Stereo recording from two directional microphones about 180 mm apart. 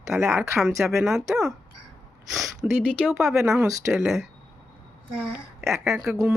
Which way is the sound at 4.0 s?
Centre (ahead or behind).